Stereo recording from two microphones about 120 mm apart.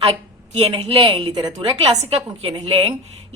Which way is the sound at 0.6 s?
50° right (ahead or behind).